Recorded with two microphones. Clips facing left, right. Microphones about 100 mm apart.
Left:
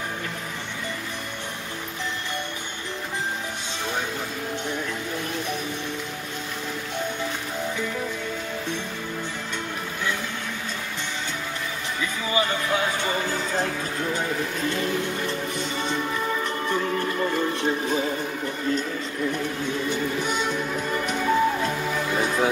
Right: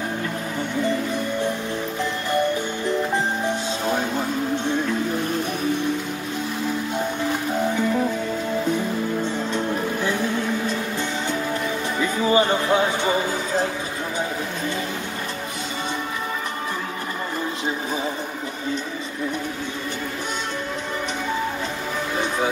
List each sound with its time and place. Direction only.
12.0 s music: 35° right (ahead or behind)